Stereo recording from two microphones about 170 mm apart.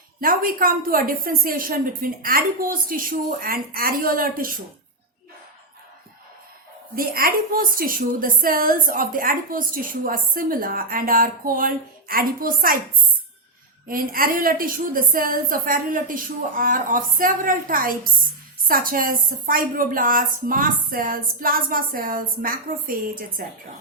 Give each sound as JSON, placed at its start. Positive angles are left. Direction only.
{"t": 0.2, "sound": "a woman's voice", "side_deg": -55}
{"t": 6.9, "sound": "a woman's voice", "side_deg": -60}
{"t": 13.8, "sound": "a woman's voice", "side_deg": -55}